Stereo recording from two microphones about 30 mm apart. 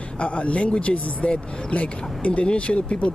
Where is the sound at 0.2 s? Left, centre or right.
Left.